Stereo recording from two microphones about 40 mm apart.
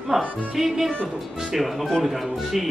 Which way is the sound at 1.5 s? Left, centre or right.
Centre.